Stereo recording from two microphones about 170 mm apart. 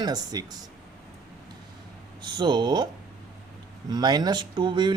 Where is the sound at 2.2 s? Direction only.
25° right (ahead or behind).